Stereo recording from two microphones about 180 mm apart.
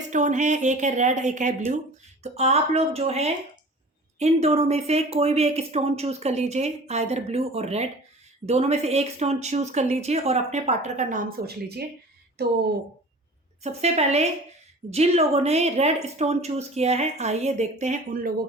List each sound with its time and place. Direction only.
0.1 s speech: 45° right (ahead or behind); by 12.5 s 60° right (ahead or behind)
13.6 s speech: 35° right (ahead or behind)